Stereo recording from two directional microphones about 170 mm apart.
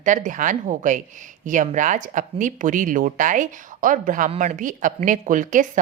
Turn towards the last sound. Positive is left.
turn(degrees=-50)  # may be behind; listen again after turning